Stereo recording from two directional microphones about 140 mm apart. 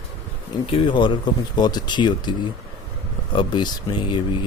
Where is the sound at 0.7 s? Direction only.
35° left (ahead or behind).